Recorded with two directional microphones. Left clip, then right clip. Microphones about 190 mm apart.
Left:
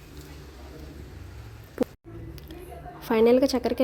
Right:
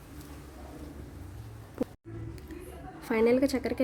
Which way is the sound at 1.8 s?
15° left (ahead or behind).